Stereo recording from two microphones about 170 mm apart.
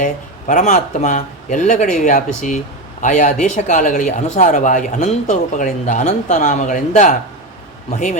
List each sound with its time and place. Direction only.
0.0 s speech: 50° left (ahead or behind)